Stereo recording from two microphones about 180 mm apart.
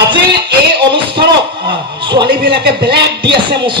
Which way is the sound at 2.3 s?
60° right (ahead or behind).